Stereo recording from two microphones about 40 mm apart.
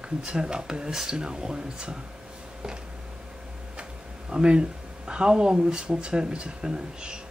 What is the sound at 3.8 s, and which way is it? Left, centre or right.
Speech, right.